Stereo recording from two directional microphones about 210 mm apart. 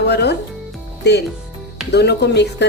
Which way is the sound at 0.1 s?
50° left (ahead or behind).